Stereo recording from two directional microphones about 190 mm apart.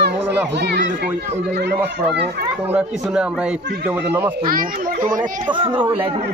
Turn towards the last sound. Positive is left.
turn(degrees=-45)  # may be behind; listen again after turning